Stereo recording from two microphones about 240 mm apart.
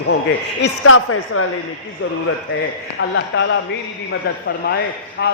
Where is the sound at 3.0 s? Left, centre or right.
Left.